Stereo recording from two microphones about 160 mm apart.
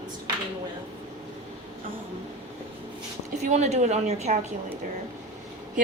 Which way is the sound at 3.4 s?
45° right (ahead or behind).